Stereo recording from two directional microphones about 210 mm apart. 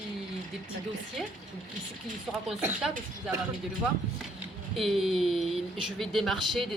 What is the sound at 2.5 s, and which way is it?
Speech, 5° right (ahead or behind).